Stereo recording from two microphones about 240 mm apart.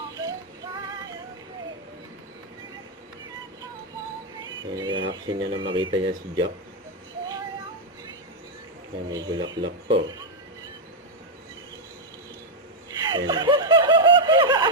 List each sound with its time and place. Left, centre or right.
0.2 s synthetic singing: centre
4.6 s speech: centre
9.0 s speech: centre
13.1 s snicker: centre